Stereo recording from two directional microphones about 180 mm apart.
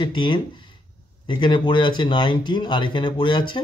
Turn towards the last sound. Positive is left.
turn(degrees=25)  # may be behind; listen again after turning